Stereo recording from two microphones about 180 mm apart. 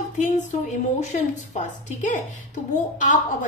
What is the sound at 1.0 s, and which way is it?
A woman's voice, 40° left (ahead or behind).